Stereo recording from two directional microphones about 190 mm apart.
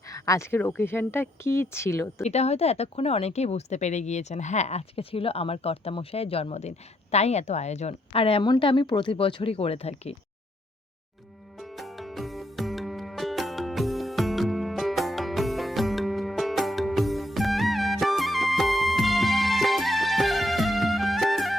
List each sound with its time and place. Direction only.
0.1 s speech: 15° left (ahead or behind)
2.2 s speech: 35° left (ahead or behind)
11.6 s music: centre (ahead or behind)